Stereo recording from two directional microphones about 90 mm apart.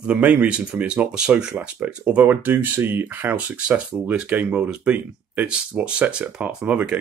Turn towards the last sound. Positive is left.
turn(degrees=-15)  # may be behind; listen again after turning